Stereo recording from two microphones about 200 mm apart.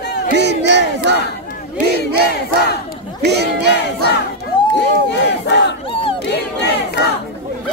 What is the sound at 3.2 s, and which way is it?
Battle cry, 55° right (ahead or behind).